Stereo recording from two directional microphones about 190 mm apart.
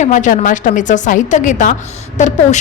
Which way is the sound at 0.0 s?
40° left (ahead or behind).